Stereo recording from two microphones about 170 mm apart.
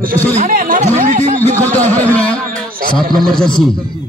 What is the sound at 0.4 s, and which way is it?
A man's voice, 55° right (ahead or behind).